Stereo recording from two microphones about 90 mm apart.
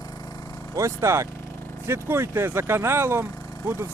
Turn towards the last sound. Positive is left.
turn(degrees=-25)  # may be behind; listen again after turning